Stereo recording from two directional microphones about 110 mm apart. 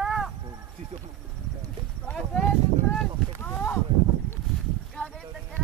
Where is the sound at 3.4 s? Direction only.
20° left (ahead or behind).